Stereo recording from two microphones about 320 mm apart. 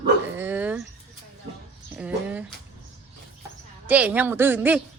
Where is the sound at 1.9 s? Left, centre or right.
Centre.